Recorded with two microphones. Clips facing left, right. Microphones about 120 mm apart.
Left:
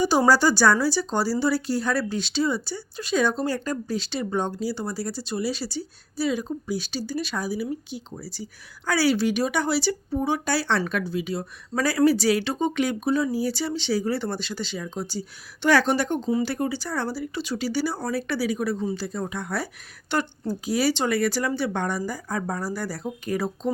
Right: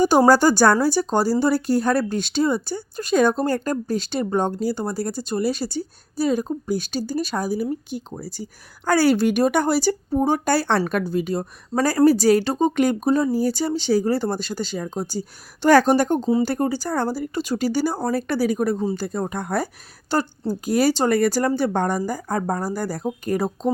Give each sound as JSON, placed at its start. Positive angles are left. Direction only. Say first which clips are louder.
{"t": 0.0, "sound": "a woman's voice", "louder": "right 4 dB", "side_deg": -50}
{"t": 20.7, "sound": "speech", "louder": "right 5 dB", "side_deg": -50}